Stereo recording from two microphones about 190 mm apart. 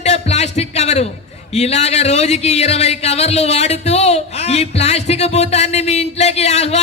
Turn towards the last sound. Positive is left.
turn(degrees=35)  # may be behind; listen again after turning